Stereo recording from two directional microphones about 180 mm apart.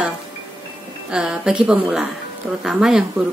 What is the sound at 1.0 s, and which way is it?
Speech, 5° right (ahead or behind).